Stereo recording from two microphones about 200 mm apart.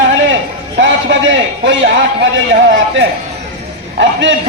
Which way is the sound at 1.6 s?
65° right (ahead or behind).